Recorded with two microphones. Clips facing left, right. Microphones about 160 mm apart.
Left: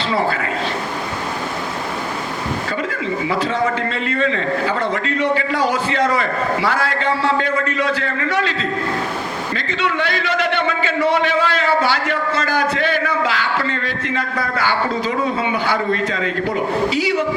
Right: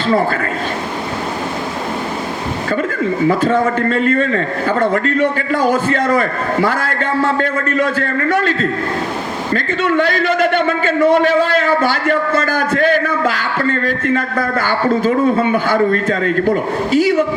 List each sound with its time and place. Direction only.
3.0 s a man's voice: 50° right (ahead or behind)